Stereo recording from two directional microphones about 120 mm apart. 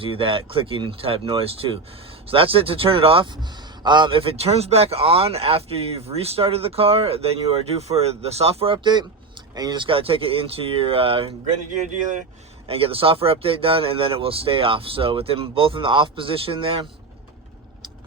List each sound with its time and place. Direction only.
0.0 s speech: 45° right (ahead or behind)
12.6 s speech: 50° right (ahead or behind)